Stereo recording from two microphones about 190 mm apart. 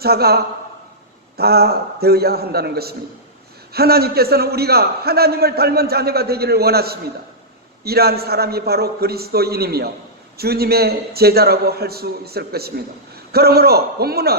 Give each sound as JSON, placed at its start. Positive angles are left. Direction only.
{"t": 0.0, "sound": "a man's voice", "side_deg": -55}